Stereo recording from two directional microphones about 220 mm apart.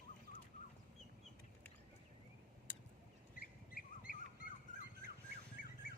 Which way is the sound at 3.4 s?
40° left (ahead or behind).